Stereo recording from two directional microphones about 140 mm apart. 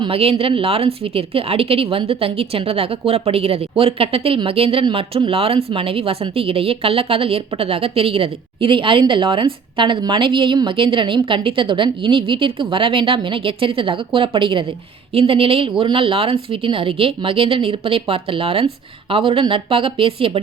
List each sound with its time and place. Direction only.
0.0 s a woman's voice: 45° right (ahead or behind)